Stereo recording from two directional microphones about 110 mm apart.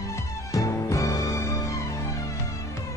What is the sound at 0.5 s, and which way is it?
Music, 30° left (ahead or behind).